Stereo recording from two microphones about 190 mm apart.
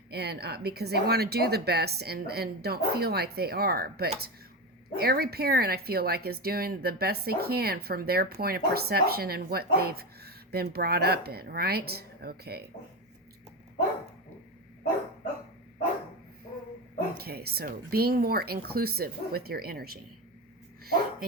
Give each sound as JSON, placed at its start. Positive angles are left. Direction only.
{"t": 0.1, "sound": "speech", "side_deg": -60}
{"t": 17.2, "sound": "speech", "side_deg": -55}
{"t": 20.8, "sound": "a sound", "side_deg": -50}